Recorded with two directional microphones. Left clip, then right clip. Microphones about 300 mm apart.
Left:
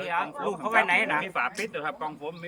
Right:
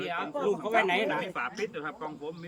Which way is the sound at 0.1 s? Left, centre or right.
Centre.